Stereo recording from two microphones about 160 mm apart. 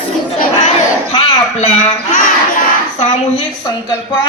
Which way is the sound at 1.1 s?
35° left (ahead or behind).